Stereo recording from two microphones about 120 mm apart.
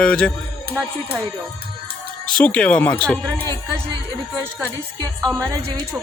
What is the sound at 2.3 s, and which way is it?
Speech, 10° left (ahead or behind).